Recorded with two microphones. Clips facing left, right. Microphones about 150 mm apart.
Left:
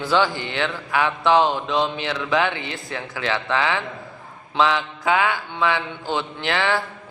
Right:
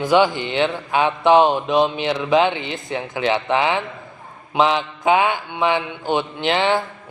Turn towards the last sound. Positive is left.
turn(degrees=-20)  # may be behind; listen again after turning